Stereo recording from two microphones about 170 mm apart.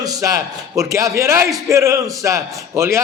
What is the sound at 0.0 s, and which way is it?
A man's voice, 20° right (ahead or behind).